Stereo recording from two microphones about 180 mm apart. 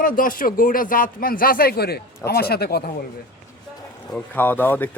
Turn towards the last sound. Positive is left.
turn(degrees=10)  # may be behind; listen again after turning